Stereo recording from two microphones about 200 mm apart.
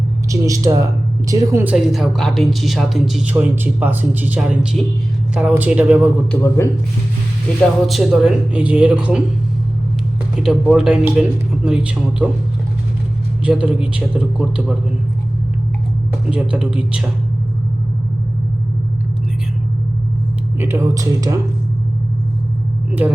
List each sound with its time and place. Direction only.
0.3 s a woman's voice: 15° right (ahead or behind)
6.3 s a man's voice: 10° left (ahead or behind)
7.9 s a woman's voice: centre (ahead or behind)
10.4 s a woman's voice: 5° right (ahead or behind)
13.4 s a woman's voice: 5° right (ahead or behind)
16.3 s a woman's voice: 5° right (ahead or behind)
20.6 s speech: 15° right (ahead or behind)
23.0 s speech: 5° right (ahead or behind)